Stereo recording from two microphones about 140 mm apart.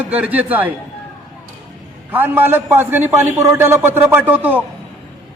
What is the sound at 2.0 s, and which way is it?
A man's voice, 15° right (ahead or behind).